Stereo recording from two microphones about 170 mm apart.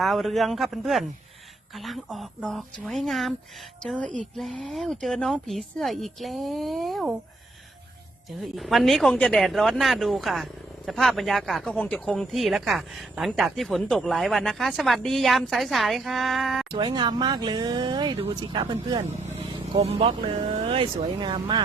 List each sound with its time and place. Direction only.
0.0 s speech: centre (ahead or behind)
8.5 s speech: centre (ahead or behind)
16.7 s speech: 25° right (ahead or behind)
19.1 s speech: 40° right (ahead or behind)